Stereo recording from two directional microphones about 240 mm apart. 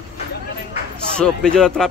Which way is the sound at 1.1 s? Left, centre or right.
Centre.